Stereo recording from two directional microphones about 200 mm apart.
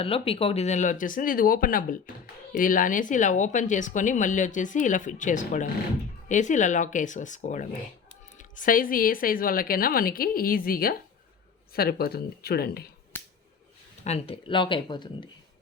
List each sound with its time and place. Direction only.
0.0 s speech: 30° left (ahead or behind); by 12.9 s 50° left (ahead or behind)
14.0 s speech: 30° left (ahead or behind)